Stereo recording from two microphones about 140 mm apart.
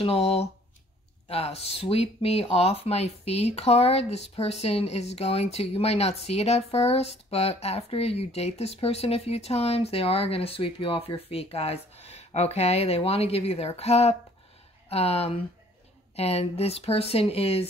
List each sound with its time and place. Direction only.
0.0 s speech: 45° left (ahead or behind)